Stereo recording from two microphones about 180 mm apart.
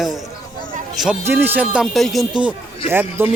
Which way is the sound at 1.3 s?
10° right (ahead or behind).